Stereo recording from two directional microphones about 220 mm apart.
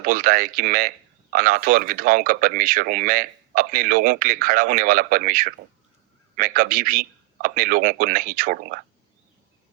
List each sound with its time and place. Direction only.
0.0 s speech: 40° right (ahead or behind)